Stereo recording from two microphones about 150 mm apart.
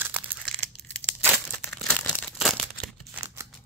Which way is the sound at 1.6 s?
10° left (ahead or behind).